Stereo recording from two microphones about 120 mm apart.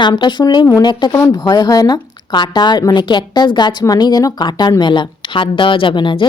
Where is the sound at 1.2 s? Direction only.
25° left (ahead or behind).